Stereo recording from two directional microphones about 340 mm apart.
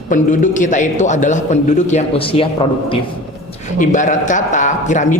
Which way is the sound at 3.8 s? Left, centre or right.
Left.